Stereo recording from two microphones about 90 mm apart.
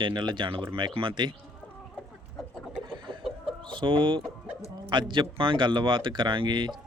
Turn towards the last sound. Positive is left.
turn(degrees=-60)  # may be behind; listen again after turning